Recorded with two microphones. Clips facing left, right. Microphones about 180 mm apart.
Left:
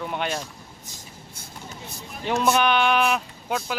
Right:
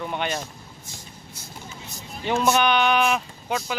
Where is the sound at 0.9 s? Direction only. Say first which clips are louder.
Right 1 dB; 55° left (ahead or behind).